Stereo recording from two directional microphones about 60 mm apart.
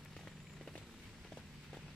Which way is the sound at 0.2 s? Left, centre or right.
Centre.